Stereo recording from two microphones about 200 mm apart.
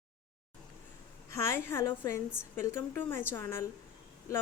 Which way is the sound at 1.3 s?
15° left (ahead or behind).